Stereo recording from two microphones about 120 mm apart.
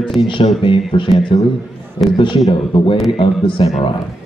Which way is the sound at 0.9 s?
45° left (ahead or behind).